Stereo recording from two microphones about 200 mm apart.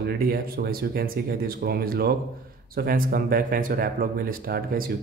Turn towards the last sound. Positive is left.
turn(degrees=-45)  # may be behind; listen again after turning